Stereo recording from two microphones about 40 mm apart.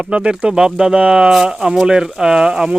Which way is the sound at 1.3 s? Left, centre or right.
Centre.